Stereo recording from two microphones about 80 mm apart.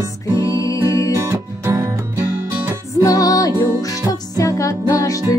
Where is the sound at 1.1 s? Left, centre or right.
Right.